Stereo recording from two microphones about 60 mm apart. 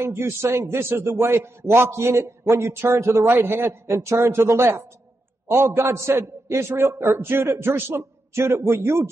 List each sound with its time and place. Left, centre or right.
0.0 s a man's voice: right